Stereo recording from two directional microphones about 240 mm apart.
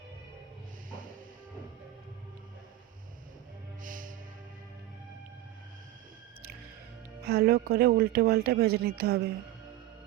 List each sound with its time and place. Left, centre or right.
0.9 s music: right
3.8 s music: right
7.3 s speech: right